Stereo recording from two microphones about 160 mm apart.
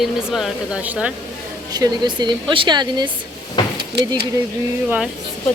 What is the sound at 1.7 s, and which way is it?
A woman's voice, 25° right (ahead or behind).